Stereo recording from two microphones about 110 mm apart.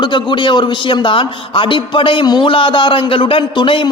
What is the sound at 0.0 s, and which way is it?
A man's voice, 45° left (ahead or behind).